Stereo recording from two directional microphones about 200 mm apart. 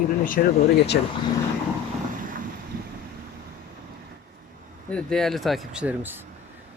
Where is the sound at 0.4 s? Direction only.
45° left (ahead or behind).